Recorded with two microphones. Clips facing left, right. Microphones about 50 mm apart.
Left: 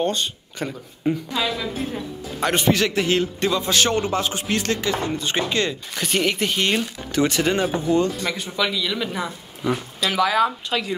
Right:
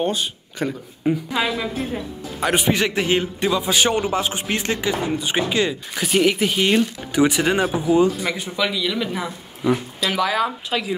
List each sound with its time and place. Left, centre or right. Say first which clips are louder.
0.0 s speech: even; centre
1.3 s a man's voice: right 3 dB; centre
1.8 s a man's voice: right 1 dB; centre